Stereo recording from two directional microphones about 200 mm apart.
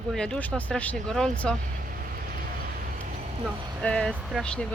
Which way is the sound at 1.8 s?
45° right (ahead or behind).